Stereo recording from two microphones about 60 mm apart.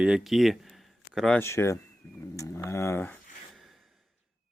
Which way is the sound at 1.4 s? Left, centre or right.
Left.